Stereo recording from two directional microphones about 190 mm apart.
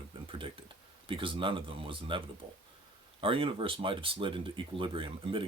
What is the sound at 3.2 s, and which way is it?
Speech, 30° right (ahead or behind).